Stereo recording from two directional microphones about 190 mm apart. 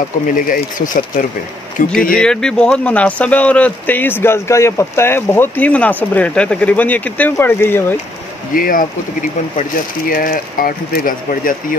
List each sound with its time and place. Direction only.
0.4 s speech: 45° left (ahead or behind)
2.1 s speech: 5° left (ahead or behind)
8.5 s speech: 50° left (ahead or behind)